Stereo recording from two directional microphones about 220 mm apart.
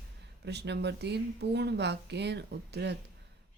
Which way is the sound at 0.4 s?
50° right (ahead or behind).